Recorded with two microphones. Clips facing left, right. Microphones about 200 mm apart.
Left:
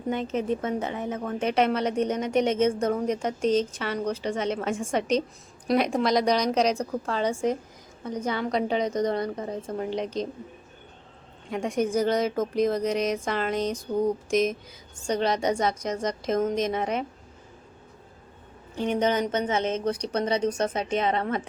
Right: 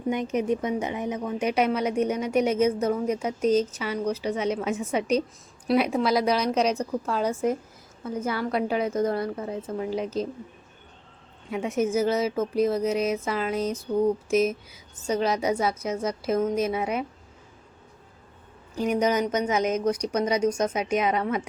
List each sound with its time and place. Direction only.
0.1 s a woman's voice: 15° right (ahead or behind)
11.5 s a woman's voice: 5° right (ahead or behind)
18.7 s a woman's voice: 25° left (ahead or behind)
19.0 s a woman's voice: 10° right (ahead or behind)